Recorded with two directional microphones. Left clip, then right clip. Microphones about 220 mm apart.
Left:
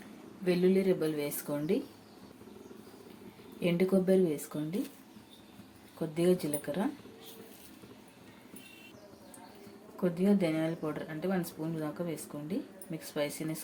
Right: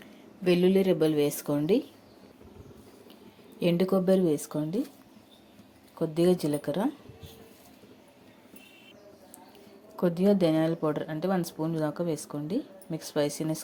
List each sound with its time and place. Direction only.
0.4 s speech: 35° right (ahead or behind)
3.6 s speech: 30° right (ahead or behind)
6.1 s speech: 25° right (ahead or behind)
10.0 s speech: 30° right (ahead or behind)